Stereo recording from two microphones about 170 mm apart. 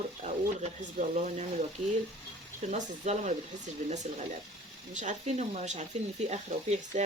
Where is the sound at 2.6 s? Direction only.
45° right (ahead or behind).